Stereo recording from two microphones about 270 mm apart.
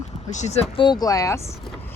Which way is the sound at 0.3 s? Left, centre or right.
Left.